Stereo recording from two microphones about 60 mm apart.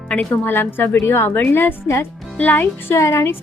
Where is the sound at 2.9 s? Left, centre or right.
Left.